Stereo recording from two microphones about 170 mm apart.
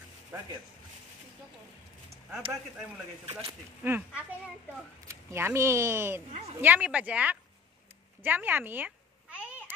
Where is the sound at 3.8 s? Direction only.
10° right (ahead or behind).